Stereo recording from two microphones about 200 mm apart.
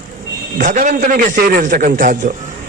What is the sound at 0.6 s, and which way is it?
A man's voice, 40° right (ahead or behind).